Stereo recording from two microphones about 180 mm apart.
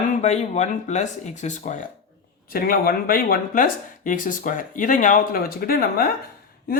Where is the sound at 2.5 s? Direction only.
55° left (ahead or behind).